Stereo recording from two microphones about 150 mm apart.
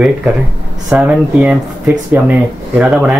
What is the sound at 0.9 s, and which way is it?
Speech, 5° right (ahead or behind).